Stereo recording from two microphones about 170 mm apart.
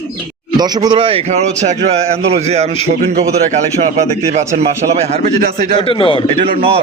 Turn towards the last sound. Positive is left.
turn(degrees=-35)  # may be behind; listen again after turning